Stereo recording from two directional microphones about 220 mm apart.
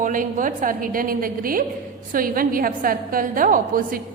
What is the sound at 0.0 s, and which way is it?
A woman's voice, 35° right (ahead or behind).